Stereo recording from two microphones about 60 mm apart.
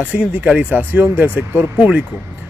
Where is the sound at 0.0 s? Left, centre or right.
Right.